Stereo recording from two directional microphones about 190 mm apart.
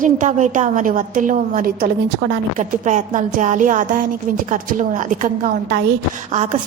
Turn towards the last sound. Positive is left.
turn(degrees=-40)  # may be behind; listen again after turning